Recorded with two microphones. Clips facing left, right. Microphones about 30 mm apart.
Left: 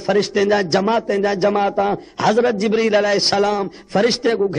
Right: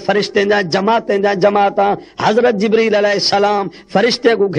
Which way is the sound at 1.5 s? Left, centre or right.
Right.